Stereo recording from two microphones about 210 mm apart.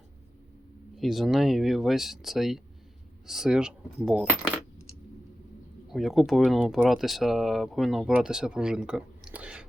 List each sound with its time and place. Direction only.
0.9 s speech: centre (ahead or behind)
5.9 s speech: centre (ahead or behind)